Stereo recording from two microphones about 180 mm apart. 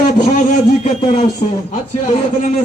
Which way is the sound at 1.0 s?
35° left (ahead or behind).